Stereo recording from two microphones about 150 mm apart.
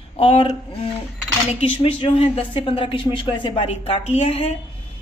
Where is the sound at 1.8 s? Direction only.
40° left (ahead or behind).